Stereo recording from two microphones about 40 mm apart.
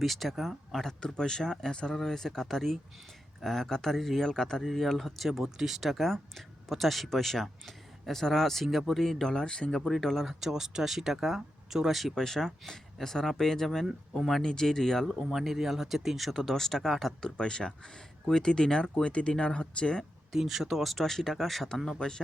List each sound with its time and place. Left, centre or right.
0.0 s speech: centre
0.9 s speech: left; by 5.3 s centre
5.3 s speech: centre
5.9 s speech: centre
10.2 s speech: centre
12.1 s speech: centre
14.4 s speech: centre
15.3 s speech: centre
17.2 s speech: left
20.3 s speech: centre
21.8 s speech: centre